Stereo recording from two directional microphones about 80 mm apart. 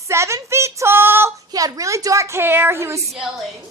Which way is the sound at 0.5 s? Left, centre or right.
Right.